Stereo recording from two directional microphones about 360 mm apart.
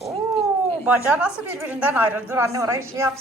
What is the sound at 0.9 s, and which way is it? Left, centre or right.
A woman's voice, centre.